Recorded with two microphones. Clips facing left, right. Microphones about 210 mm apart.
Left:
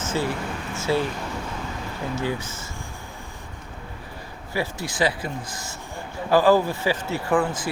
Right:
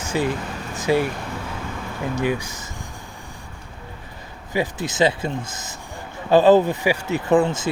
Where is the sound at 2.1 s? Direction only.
15° right (ahead or behind).